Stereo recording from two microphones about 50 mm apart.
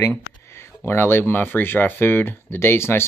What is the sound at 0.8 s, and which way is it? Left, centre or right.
Speech, left.